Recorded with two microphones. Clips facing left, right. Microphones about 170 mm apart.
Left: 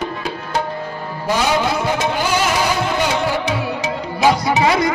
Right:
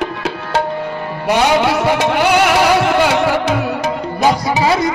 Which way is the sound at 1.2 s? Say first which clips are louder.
Right 4 dB; 70° right (ahead or behind).